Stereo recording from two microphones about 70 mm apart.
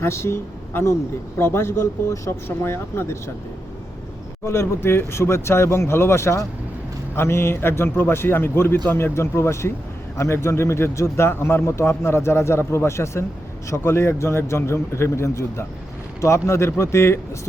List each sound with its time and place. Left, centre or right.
0.0 s a man's voice: left
4.4 s a man's voice: left